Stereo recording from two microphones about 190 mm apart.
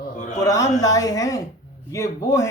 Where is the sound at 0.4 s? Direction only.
15° left (ahead or behind).